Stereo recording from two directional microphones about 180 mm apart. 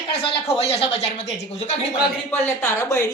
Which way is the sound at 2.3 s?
10° left (ahead or behind).